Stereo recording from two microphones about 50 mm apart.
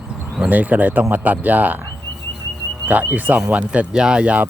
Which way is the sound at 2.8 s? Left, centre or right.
Right.